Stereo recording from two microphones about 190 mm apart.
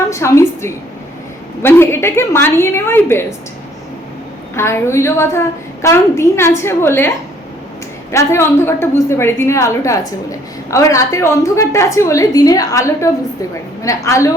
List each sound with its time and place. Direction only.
0.1 s a woman's voice: 15° left (ahead or behind)
4.5 s a woman's voice: 15° left (ahead or behind)
8.1 s a woman's voice: 15° left (ahead or behind)